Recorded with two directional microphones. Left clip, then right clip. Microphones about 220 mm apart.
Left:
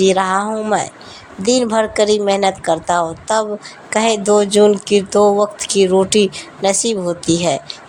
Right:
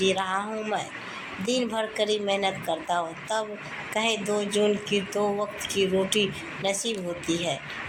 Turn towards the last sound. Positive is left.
turn(degrees=45)  # may be behind; listen again after turning